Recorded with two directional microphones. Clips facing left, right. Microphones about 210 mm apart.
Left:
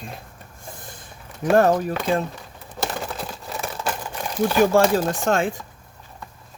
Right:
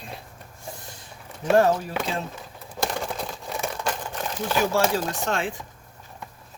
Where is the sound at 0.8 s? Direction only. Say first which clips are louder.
Left 2 dB; 50° left (ahead or behind).